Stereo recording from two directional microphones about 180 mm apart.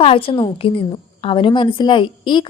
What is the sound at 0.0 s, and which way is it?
A woman's voice, 30° left (ahead or behind).